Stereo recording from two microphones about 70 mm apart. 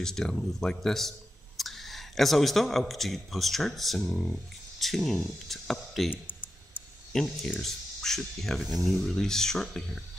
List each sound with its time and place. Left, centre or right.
0.0 s speech: centre
6.0 s a sound: left
7.1 s speech: centre